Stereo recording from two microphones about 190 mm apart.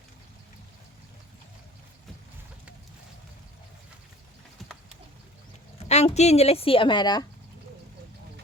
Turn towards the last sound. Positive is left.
turn(degrees=20)  # may be behind; listen again after turning